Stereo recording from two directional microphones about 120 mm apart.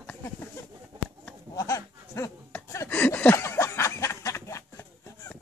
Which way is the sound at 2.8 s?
15° left (ahead or behind).